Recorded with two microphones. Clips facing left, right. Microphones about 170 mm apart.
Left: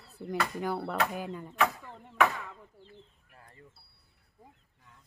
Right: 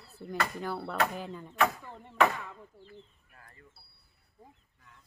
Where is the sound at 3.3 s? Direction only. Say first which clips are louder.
Left 2 dB; 25° left (ahead or behind).